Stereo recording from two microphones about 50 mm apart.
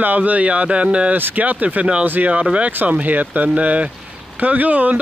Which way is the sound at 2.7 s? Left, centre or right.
Right.